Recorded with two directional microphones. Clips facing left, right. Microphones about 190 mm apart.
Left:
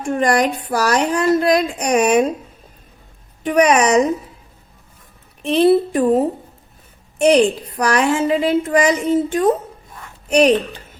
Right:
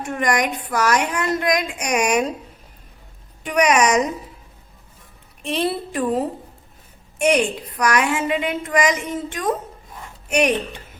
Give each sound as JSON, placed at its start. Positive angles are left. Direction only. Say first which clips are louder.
{"t": 0.0, "sound": "a woman's voice", "louder": "left 5 dB", "side_deg": 30}
{"t": 3.4, "sound": "a woman's voice", "louder": "left 3 dB", "side_deg": 30}
{"t": 5.6, "sound": "a woman's voice", "louder": "left 10 dB", "side_deg": 25}